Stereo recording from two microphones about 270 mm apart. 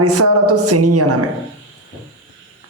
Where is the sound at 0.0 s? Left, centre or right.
Right.